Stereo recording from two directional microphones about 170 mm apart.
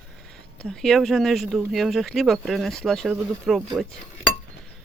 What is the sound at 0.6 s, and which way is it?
Speech, centre (ahead or behind).